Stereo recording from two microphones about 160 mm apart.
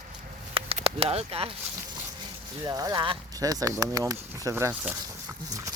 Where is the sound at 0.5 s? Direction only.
35° right (ahead or behind).